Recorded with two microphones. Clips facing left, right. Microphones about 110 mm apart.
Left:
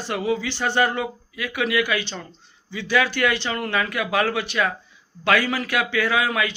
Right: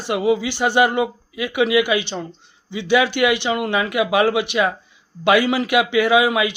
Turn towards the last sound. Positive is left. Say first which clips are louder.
# right 6 dB
turn(degrees=-15)  # may be behind; listen again after turning